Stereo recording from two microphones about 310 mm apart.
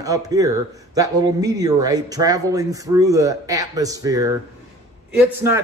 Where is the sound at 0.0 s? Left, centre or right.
Centre.